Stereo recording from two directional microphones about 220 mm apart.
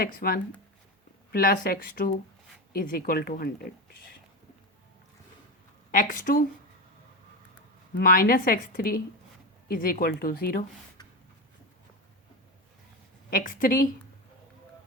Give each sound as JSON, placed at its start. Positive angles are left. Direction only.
{"t": 0.0, "sound": "a woman's voice", "side_deg": 45}
{"t": 5.9, "sound": "a woman's voice", "side_deg": 35}
{"t": 7.9, "sound": "a woman's voice", "side_deg": 40}
{"t": 13.3, "sound": "a woman's voice", "side_deg": 40}